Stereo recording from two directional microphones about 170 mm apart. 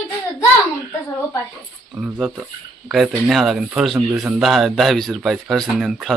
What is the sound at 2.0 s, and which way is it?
Speech, 5° right (ahead or behind).